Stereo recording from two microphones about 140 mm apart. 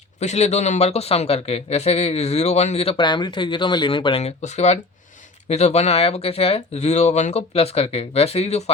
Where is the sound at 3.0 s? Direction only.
35° left (ahead or behind).